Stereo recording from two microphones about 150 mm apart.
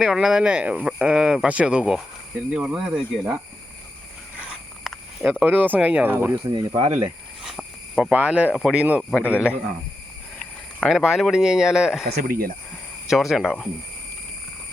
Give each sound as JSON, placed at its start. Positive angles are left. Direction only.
{"t": 0.0, "sound": "speech", "side_deg": -5}
{"t": 4.4, "sound": "walk", "side_deg": -10}
{"t": 5.4, "sound": "speech", "side_deg": -10}
{"t": 6.5, "sound": "speech", "side_deg": -30}
{"t": 7.4, "sound": "cricket", "side_deg": 0}
{"t": 8.5, "sound": "speech", "side_deg": -5}
{"t": 9.0, "sound": "a man's voice", "side_deg": 10}
{"t": 10.8, "sound": "speech", "side_deg": 0}
{"t": 12.0, "sound": "speech", "side_deg": -75}
{"t": 13.1, "sound": "speech", "side_deg": 0}